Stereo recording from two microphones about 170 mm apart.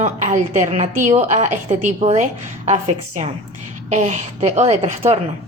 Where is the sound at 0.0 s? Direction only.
45° right (ahead or behind).